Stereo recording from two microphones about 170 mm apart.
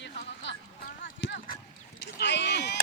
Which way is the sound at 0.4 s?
90° left.